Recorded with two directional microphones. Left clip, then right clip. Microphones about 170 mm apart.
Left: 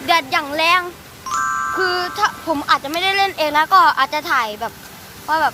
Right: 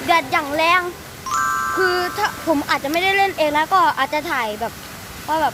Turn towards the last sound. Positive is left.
turn(degrees=0)  # may be behind; listen again after turning